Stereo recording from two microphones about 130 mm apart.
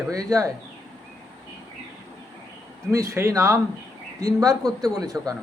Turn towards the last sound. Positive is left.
turn(degrees=-30)  # may be behind; listen again after turning